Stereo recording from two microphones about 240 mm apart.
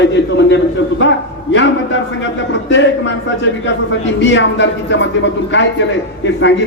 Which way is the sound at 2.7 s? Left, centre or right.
Left.